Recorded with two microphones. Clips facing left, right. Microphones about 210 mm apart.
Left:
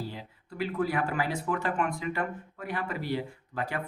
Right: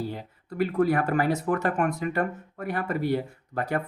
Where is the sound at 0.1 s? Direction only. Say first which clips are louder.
Right 6 dB; 50° right (ahead or behind).